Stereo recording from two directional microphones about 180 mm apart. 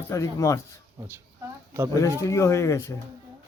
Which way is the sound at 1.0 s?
15° right (ahead or behind).